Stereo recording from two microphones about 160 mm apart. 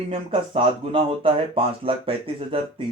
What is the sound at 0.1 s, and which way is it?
Speech, 35° right (ahead or behind).